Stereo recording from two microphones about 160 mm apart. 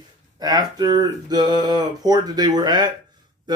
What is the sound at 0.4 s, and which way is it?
Speech, 25° right (ahead or behind).